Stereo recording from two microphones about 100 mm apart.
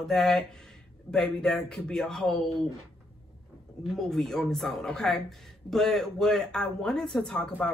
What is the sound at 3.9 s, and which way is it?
Speech, 5° left (ahead or behind).